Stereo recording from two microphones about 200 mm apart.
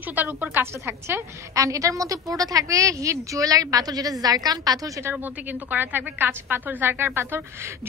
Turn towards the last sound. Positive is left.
turn(degrees=-10)  # may be behind; listen again after turning